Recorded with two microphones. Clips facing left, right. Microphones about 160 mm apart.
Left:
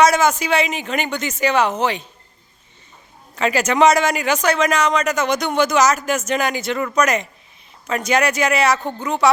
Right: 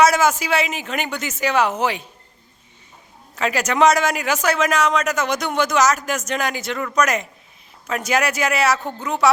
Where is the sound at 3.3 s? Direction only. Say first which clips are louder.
Left 3 dB; centre (ahead or behind).